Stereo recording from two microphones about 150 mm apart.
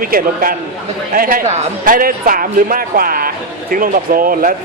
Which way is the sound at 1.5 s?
55° right (ahead or behind).